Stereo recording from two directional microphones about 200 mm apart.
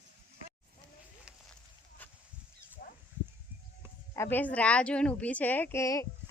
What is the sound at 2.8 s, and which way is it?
Wild animals, 45° left (ahead or behind).